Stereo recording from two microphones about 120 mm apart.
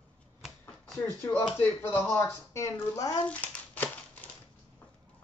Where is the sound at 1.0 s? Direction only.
20° left (ahead or behind).